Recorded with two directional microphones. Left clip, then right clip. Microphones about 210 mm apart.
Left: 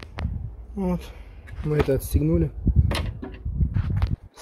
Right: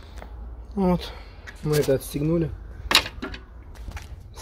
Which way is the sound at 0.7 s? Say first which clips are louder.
Right 5 dB; 15° right (ahead or behind).